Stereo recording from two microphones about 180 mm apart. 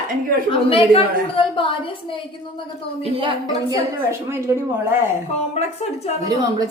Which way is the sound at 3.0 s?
30° right (ahead or behind).